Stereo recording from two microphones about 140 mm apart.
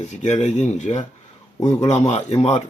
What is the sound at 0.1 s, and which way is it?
Speech, 55° left (ahead or behind).